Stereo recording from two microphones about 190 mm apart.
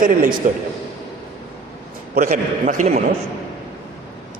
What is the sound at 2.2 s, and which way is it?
Speech, 40° right (ahead or behind).